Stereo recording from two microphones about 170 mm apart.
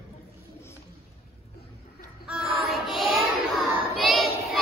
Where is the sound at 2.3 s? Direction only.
5° right (ahead or behind).